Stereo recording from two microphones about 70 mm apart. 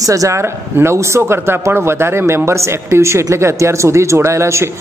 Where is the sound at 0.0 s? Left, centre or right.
Right.